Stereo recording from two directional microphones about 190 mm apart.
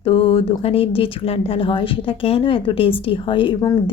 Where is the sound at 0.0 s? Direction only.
30° left (ahead or behind).